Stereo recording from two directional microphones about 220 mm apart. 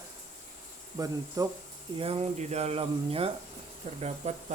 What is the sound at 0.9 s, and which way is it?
Speech, 15° right (ahead or behind).